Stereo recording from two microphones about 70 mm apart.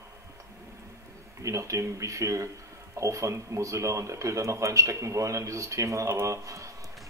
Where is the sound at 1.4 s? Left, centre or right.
Right.